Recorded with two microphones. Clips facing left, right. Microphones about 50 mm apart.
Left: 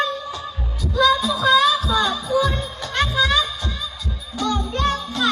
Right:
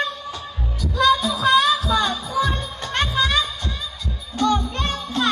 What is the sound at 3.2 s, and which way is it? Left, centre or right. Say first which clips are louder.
Heart sounds: left 2 dB; left.